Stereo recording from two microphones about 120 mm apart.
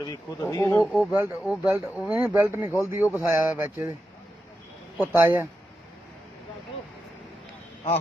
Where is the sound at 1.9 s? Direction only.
10° right (ahead or behind).